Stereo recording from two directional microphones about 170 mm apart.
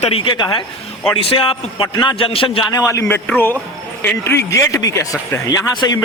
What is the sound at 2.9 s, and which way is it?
Speech, 15° left (ahead or behind).